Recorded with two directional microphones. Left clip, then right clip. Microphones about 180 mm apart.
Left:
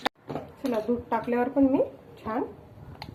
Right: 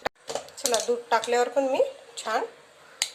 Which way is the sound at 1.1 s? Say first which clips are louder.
Right 5 dB; 35° right (ahead or behind).